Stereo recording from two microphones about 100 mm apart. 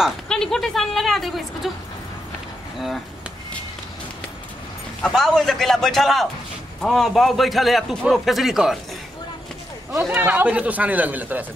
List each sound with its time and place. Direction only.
0.3 s a woman's voice: 5° left (ahead or behind)
5.0 s a woman's voice: 5° left (ahead or behind)
9.9 s speech: 20° right (ahead or behind)